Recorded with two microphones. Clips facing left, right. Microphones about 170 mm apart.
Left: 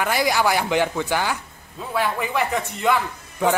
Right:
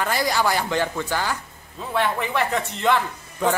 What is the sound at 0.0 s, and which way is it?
A man's voice, 10° left (ahead or behind).